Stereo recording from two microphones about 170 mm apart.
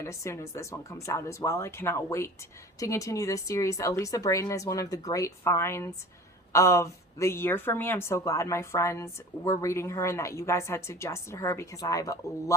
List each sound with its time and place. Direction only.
0.0 s speech: 15° left (ahead or behind)